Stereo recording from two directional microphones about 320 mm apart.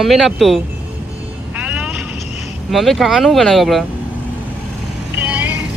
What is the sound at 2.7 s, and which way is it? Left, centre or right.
Speech, centre.